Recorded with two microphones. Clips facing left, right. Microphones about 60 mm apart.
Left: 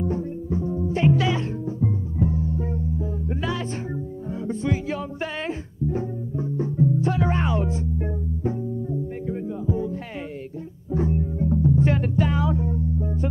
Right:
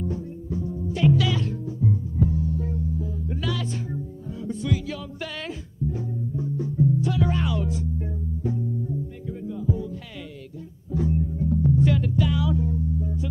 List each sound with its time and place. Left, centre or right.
0.0 s music: left
10.9 s guitar: left
11.7 s music: left